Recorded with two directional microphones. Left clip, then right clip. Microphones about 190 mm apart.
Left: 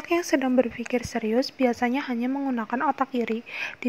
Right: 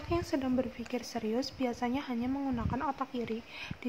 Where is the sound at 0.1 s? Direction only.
35° left (ahead or behind).